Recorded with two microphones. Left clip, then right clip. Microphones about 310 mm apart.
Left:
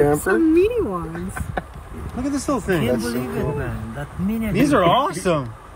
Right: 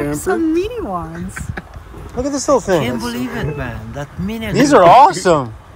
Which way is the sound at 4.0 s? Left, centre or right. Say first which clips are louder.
Right 2 dB; right.